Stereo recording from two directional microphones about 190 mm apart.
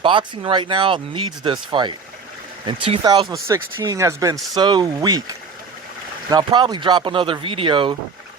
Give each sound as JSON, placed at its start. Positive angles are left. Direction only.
{"t": 0.0, "sound": "speech", "side_deg": -25}
{"t": 6.3, "sound": "speech", "side_deg": -20}